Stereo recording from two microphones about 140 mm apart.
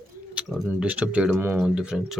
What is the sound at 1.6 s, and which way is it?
Speech, 5° right (ahead or behind).